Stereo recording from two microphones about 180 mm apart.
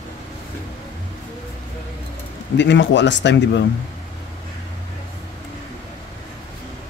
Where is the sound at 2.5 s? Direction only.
80° left.